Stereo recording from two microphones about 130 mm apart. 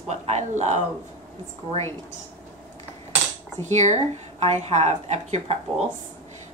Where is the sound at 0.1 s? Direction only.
60° right (ahead or behind).